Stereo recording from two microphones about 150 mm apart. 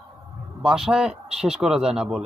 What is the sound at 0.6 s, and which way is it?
A man's voice, 5° right (ahead or behind).